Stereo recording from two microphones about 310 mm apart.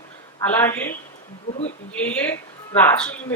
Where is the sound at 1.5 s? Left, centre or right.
Left.